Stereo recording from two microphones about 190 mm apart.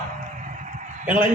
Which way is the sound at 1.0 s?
10° right (ahead or behind).